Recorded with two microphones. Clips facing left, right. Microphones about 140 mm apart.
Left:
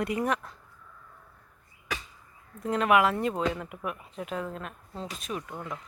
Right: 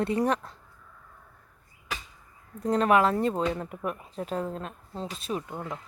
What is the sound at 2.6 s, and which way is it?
Speech, 35° right (ahead or behind).